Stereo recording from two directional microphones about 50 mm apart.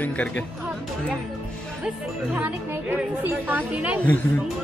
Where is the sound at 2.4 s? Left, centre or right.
Right.